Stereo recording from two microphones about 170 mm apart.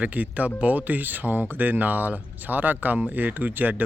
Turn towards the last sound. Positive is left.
turn(degrees=-10)  # may be behind; listen again after turning